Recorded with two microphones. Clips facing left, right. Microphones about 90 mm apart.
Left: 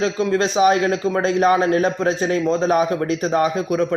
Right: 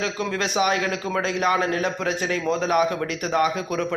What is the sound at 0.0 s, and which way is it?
A man's voice, 30° left (ahead or behind).